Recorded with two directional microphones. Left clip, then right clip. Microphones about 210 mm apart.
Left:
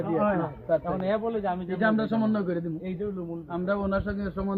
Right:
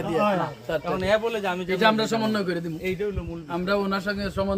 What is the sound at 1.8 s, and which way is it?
Speech, 30° right (ahead or behind).